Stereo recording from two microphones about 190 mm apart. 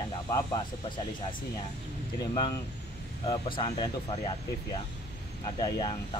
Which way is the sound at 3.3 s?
25° left (ahead or behind).